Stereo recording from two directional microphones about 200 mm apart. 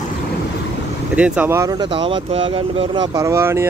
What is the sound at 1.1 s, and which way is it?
Speech, 5° right (ahead or behind).